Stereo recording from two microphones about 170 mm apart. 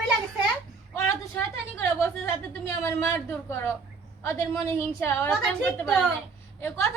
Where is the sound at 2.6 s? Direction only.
15° left (ahead or behind).